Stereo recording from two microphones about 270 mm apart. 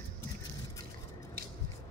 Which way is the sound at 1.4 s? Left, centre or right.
Right.